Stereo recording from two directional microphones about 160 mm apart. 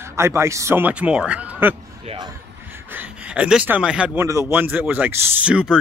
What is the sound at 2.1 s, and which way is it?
Speech, 40° right (ahead or behind).